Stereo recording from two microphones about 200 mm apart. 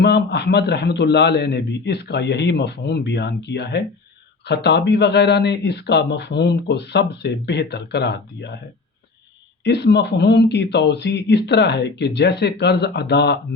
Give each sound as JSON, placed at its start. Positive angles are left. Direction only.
{"t": 0.0, "sound": "speech", "side_deg": 55}
{"t": 9.6, "sound": "speech", "side_deg": 60}